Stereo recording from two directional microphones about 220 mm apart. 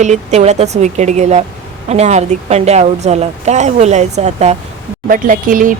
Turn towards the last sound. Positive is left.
turn(degrees=-40)  # may be behind; listen again after turning